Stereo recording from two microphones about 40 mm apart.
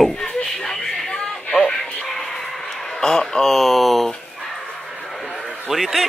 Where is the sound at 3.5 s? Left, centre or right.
Centre.